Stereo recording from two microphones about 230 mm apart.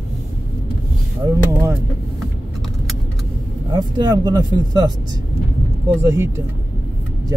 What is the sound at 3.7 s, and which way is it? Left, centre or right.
Speech, centre.